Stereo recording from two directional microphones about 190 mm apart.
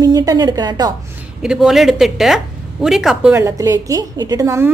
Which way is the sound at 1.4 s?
5° right (ahead or behind).